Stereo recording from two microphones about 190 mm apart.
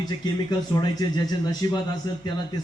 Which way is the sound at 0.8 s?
20° left (ahead or behind).